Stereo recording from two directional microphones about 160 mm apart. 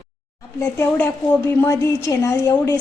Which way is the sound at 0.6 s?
15° left (ahead or behind).